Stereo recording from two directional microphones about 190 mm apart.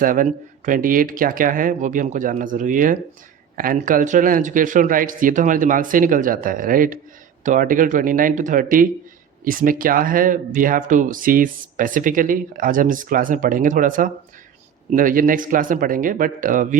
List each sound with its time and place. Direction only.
0.0 s speech: 45° right (ahead or behind)